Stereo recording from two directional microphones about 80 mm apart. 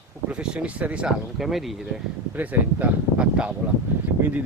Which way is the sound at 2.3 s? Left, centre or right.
Right.